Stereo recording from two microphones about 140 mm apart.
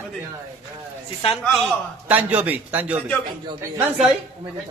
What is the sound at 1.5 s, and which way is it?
Speech, centre (ahead or behind).